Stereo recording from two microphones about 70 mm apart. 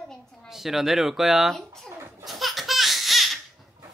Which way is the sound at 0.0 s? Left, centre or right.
Centre.